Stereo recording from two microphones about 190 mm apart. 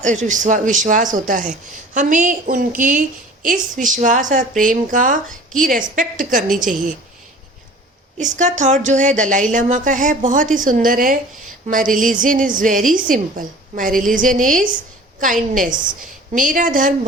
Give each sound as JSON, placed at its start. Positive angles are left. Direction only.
{"t": 0.0, "sound": "a woman's voice", "side_deg": -40}
{"t": 8.2, "sound": "a woman's voice", "side_deg": -40}